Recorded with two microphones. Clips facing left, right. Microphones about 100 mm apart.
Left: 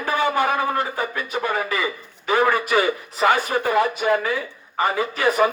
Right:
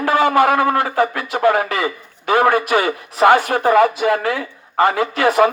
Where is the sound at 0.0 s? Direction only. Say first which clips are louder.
Right 7 dB; 80° right.